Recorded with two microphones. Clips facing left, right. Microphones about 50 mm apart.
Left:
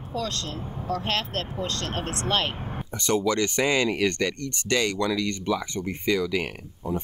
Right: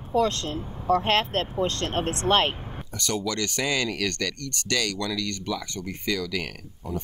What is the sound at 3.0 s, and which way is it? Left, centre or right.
Speech, left.